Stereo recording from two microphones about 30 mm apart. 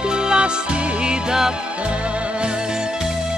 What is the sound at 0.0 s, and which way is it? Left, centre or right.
Music, right.